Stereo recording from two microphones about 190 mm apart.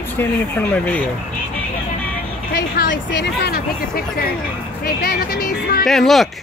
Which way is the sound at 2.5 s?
60° left (ahead or behind).